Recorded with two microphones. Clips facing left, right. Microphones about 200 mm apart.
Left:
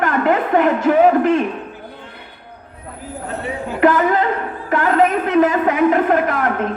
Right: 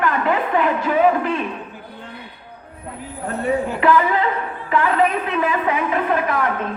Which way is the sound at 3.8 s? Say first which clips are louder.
Left 5 dB; 45° left (ahead or behind).